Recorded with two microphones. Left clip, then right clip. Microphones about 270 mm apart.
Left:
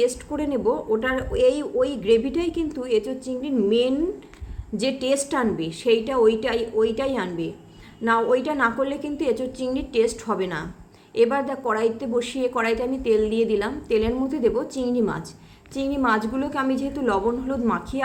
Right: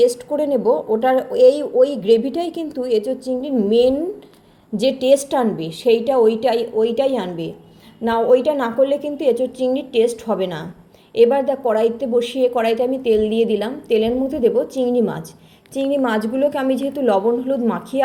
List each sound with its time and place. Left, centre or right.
0.3 s a woman's voice: centre
15.7 s a woman's voice: left
16.0 s a woman's voice: centre